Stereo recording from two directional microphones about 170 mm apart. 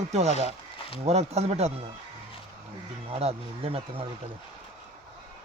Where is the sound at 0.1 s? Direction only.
40° right (ahead or behind).